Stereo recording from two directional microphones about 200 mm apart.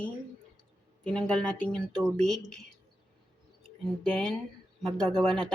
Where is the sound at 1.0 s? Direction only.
5° left (ahead or behind).